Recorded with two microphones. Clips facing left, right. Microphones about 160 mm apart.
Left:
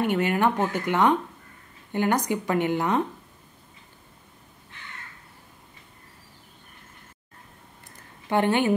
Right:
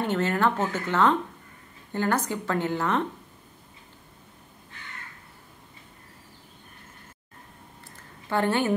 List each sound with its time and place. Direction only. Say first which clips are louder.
0.0 s speech: left 2 dB; 15° left (ahead or behind)
8.3 s speech: left 2 dB; 20° left (ahead or behind)